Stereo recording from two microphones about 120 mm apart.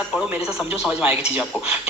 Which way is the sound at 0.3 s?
5° right (ahead or behind).